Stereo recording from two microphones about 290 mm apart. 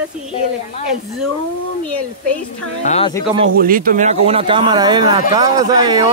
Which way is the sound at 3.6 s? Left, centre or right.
Right.